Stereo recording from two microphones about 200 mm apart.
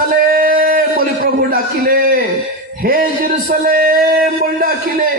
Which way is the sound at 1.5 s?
45° right (ahead or behind).